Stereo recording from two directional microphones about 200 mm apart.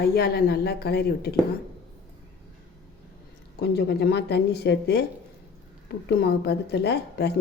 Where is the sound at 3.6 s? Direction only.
55° left (ahead or behind).